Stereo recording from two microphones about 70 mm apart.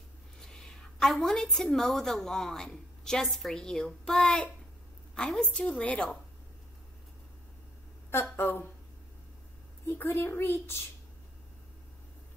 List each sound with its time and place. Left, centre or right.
0.4 s a woman's voice: centre
8.1 s a child's voice: left
9.8 s a child's voice: left